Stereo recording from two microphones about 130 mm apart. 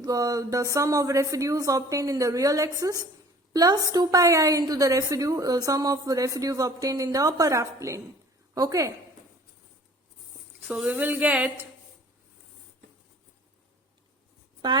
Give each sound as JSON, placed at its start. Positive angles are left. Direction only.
{"t": 0.0, "sound": "a woman's voice", "side_deg": -30}
{"t": 10.7, "sound": "speech", "side_deg": -10}